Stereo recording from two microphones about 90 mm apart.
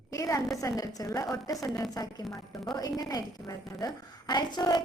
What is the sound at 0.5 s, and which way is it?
A woman's voice, 40° left (ahead or behind).